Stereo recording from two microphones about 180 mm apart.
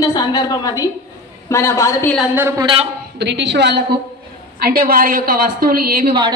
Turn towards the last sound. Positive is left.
turn(degrees=-55)  # may be behind; listen again after turning